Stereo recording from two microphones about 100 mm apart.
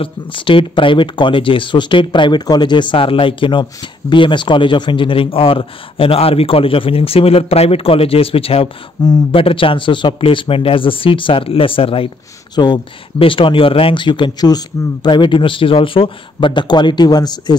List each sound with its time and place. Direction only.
0.0 s a man's voice: 60° left (ahead or behind)
9.0 s a man's voice: 45° left (ahead or behind)
9.3 s speech: 65° left (ahead or behind)
12.5 s a man's voice: 45° left (ahead or behind)
13.2 s a man's voice: 60° left (ahead or behind); by 17.6 s 45° left (ahead or behind)